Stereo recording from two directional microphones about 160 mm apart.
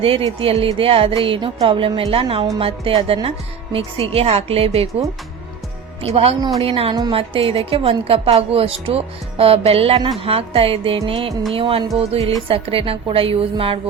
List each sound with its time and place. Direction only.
0.0 s a woman's voice: 35° right (ahead or behind)
6.0 s a woman's voice: 40° right (ahead or behind)